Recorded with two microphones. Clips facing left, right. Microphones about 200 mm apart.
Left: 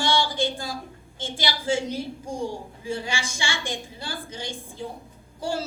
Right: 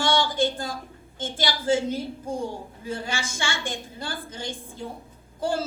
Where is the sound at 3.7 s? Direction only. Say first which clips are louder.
Even; 55° right (ahead or behind).